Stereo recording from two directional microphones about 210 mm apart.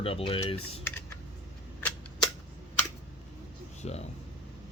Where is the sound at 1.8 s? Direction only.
5° left (ahead or behind).